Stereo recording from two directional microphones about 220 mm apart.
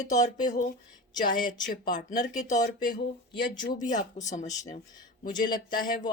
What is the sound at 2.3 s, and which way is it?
Speech, 35° left (ahead or behind).